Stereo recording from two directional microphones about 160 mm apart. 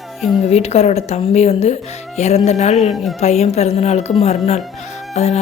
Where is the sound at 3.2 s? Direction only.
40° left (ahead or behind).